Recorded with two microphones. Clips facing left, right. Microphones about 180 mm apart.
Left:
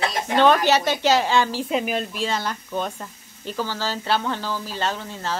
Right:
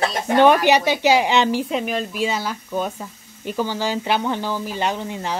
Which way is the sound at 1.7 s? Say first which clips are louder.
Right 1 dB; centre (ahead or behind).